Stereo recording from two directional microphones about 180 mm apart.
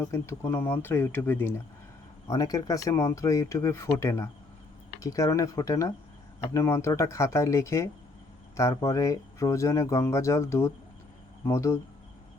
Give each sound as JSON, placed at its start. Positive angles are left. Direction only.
{"t": 0.0, "sound": "speech", "side_deg": 15}